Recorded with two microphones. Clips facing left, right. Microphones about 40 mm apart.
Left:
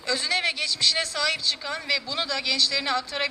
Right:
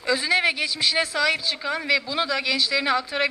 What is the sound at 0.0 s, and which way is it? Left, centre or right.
A man's voice, centre.